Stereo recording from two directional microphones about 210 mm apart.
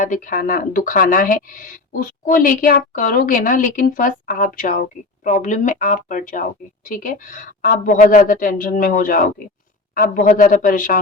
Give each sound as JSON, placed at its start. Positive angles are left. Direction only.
{"t": 0.0, "sound": "speech", "side_deg": 40}